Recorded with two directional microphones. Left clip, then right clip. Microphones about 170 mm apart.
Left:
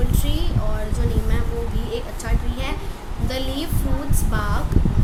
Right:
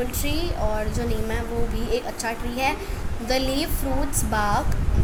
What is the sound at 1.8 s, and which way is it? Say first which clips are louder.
A woman's voice: right 3 dB; 25° right (ahead or behind).